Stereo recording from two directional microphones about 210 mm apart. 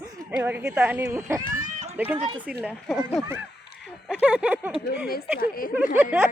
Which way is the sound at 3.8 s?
5° right (ahead or behind).